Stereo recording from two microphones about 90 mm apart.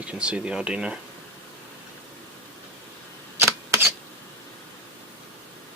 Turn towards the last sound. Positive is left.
turn(degrees=-30)  # may be behind; listen again after turning